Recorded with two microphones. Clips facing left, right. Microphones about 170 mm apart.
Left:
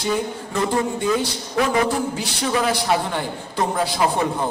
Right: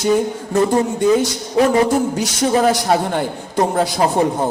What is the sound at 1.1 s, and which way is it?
A man's voice, 45° right (ahead or behind).